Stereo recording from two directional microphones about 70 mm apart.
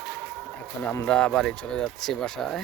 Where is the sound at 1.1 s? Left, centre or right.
Centre.